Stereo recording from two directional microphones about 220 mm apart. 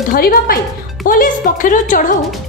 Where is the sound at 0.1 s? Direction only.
40° left (ahead or behind).